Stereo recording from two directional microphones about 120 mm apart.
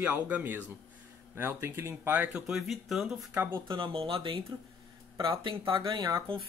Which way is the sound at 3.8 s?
50° right (ahead or behind).